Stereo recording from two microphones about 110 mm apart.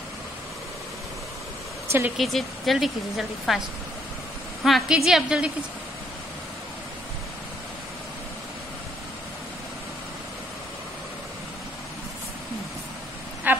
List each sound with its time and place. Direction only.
1.9 s speech: 25° right (ahead or behind)
2.1 s a woman's voice: centre (ahead or behind)
4.6 s a woman's voice: 5° right (ahead or behind)
13.5 s a sound: 15° right (ahead or behind)